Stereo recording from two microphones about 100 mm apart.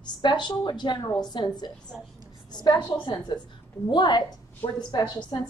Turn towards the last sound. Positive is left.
turn(degrees=45)  # may be behind; listen again after turning